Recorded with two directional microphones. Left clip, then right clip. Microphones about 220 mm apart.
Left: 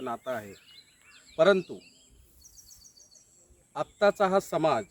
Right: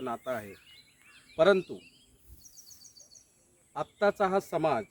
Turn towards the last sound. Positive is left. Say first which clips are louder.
# left 3 dB
turn(degrees=30)  # may be behind; listen again after turning